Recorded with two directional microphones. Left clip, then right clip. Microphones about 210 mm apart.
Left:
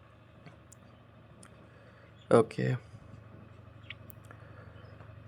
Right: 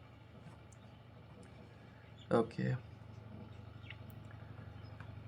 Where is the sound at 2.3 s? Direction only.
40° left (ahead or behind).